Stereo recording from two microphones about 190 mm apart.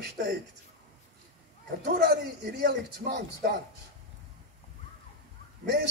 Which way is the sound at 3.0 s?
60° right (ahead or behind).